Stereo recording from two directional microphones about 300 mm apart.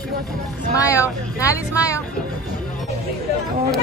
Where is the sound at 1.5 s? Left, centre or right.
Centre.